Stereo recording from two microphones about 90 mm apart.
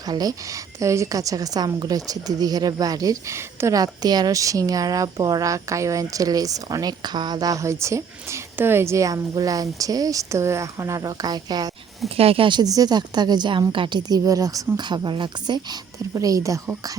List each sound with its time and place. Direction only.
0.1 s a woman's voice: 45° right (ahead or behind)
3.8 s speech: 50° right (ahead or behind)
12.0 s speech: 90° right
12.5 s a woman's voice: 45° right (ahead or behind); by 14.0 s 65° right (ahead or behind)
14.1 s speech: 40° right (ahead or behind)
14.8 s speech: 55° right (ahead or behind)
16.1 s speech: 40° right (ahead or behind)